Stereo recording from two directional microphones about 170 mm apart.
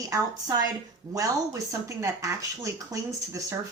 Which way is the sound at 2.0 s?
20° right (ahead or behind).